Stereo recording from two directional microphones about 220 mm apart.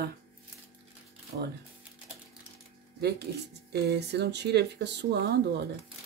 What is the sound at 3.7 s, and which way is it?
Speech, 50° right (ahead or behind).